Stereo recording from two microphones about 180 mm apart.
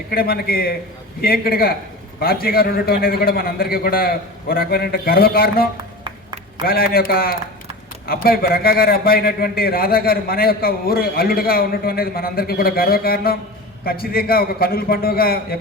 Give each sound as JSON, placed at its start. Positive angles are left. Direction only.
{"t": 0.1, "sound": "a man's voice", "side_deg": 60}
{"t": 6.7, "sound": "a man's voice", "side_deg": 55}